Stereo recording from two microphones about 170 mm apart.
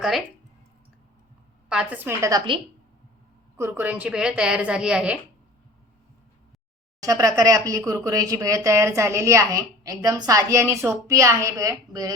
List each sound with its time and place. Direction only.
0.0 s a woman's voice: centre (ahead or behind)
1.7 s a woman's voice: 5° right (ahead or behind)
3.6 s a woman's voice: 10° right (ahead or behind)
7.0 s speech: 20° right (ahead or behind)